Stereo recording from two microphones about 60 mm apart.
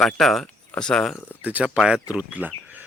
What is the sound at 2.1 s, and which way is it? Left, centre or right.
Speech, right.